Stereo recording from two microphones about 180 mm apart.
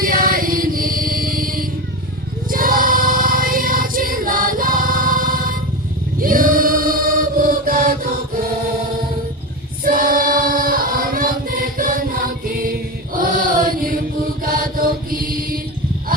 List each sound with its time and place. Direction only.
0.0 s music: 50° right (ahead or behind)
2.5 s choir: 50° right (ahead or behind)
6.1 s chant: 50° right (ahead or behind)
9.8 s choir: 50° right (ahead or behind)
13.1 s chant: 50° right (ahead or behind)
15.3 s mantra: 55° right (ahead or behind)